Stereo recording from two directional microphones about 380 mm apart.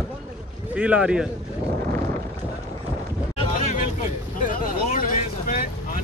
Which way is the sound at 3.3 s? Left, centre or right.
Centre.